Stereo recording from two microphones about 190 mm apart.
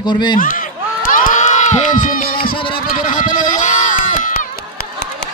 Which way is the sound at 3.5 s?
40° left (ahead or behind).